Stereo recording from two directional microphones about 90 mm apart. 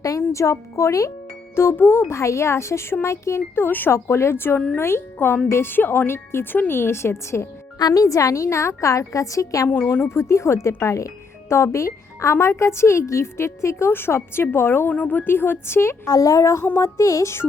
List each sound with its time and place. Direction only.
0.0 s speech: 35° left (ahead or behind)
7.8 s a woman's voice: 40° left (ahead or behind)
9.6 s speech: 25° left (ahead or behind)
16.0 s a woman's voice: 40° left (ahead or behind)